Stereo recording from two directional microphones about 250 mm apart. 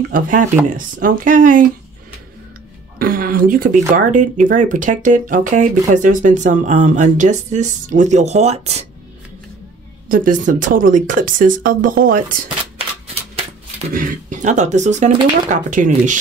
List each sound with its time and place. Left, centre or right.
0.1 s speech: right
3.0 s speech: right
10.0 s speech: right